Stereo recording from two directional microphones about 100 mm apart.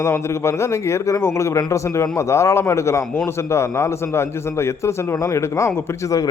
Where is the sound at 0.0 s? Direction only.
30° left (ahead or behind).